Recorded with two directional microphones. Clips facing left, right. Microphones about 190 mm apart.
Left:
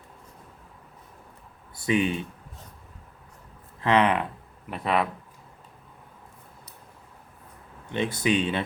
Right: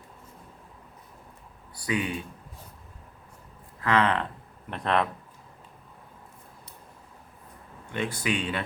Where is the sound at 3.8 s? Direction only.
20° left (ahead or behind).